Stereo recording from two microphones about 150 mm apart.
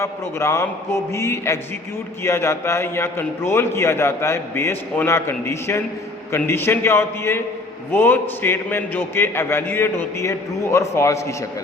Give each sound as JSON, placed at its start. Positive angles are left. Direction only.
{"t": 0.0, "sound": "a man's voice", "side_deg": 20}